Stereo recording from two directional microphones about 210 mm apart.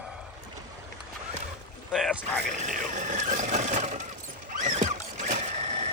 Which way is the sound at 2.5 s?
35° right (ahead or behind).